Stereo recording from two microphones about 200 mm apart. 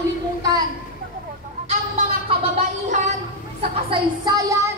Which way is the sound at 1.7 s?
30° right (ahead or behind).